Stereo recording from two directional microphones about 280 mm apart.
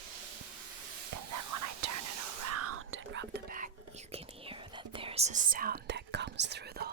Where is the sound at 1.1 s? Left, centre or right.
Right.